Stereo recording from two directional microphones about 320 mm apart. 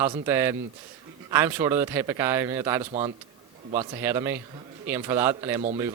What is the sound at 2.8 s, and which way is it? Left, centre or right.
Speech, right.